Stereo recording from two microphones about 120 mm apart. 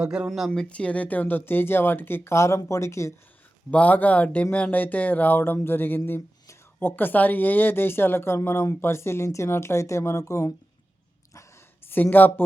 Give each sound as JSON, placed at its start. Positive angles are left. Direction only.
{"t": 0.0, "sound": "speech", "side_deg": -10}
{"t": 3.7, "sound": "speech", "side_deg": 10}
{"t": 11.9, "sound": "speech", "side_deg": 15}